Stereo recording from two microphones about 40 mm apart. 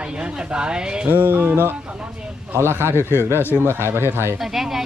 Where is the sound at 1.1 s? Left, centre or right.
Right.